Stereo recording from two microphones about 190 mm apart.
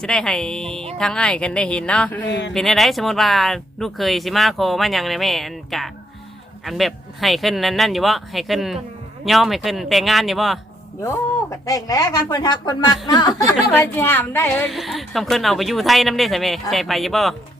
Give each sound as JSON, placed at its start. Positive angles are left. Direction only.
{"t": 0.0, "sound": "a woman's voice", "side_deg": 5}
{"t": 2.2, "sound": "speech", "side_deg": 65}
{"t": 2.5, "sound": "a woman's voice", "side_deg": 0}
{"t": 11.0, "sound": "speech", "side_deg": 15}
{"t": 13.9, "sound": "a woman's voice", "side_deg": 10}